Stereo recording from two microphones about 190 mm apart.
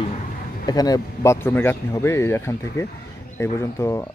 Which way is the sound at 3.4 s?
15° left (ahead or behind).